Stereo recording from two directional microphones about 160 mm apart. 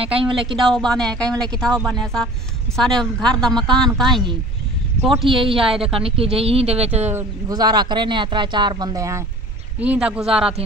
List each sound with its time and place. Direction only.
0.0 s speech: 35° right (ahead or behind)
0.6 s a woman's voice: centre (ahead or behind)
2.7 s a woman's voice: 5° left (ahead or behind)
5.3 s speech: 35° right (ahead or behind)
7.1 s speech: 15° right (ahead or behind)
7.5 s speech: 25° right (ahead or behind)
9.8 s a woman's voice: 5° right (ahead or behind)